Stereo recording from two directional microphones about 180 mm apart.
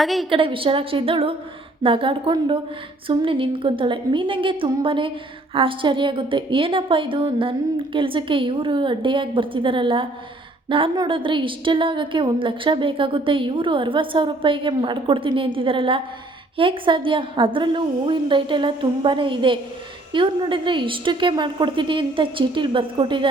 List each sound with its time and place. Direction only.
0.0 s a woman's voice: centre (ahead or behind)
0.3 s a woman's voice: 30° right (ahead or behind)